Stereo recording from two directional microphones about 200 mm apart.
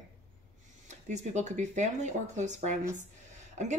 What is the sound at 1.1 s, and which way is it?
Speech, 35° right (ahead or behind).